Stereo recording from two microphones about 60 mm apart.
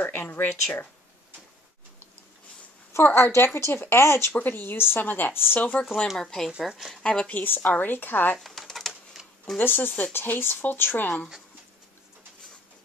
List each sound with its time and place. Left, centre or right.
0.0 s speech: left
3.2 s speech: left
4.3 s speech: left
5.6 s speech: left
6.0 s speech: centre
7.2 s speech: left
8.5 s pigeon: centre
9.6 s speech: left